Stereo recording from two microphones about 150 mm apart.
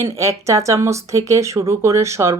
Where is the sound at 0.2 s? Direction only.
20° right (ahead or behind).